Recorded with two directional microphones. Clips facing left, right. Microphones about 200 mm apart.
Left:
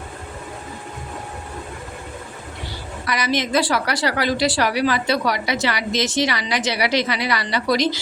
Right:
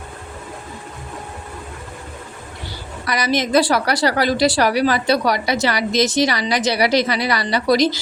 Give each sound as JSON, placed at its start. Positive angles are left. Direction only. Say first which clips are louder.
{"t": 3.1, "sound": "a woman's voice", "louder": "right 3 dB", "side_deg": -40}